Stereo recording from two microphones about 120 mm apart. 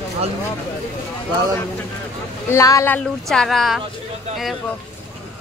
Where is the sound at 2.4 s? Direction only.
25° left (ahead or behind).